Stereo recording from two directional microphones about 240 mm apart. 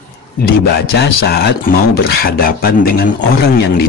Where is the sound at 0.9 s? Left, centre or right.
Left.